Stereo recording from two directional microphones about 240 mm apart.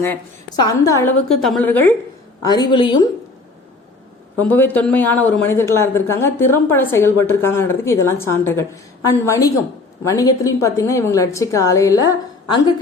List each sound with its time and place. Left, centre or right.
0.0 s a man's voice: centre
4.4 s a man's voice: centre